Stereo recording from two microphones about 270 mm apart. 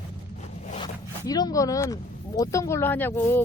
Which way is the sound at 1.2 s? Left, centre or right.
Centre.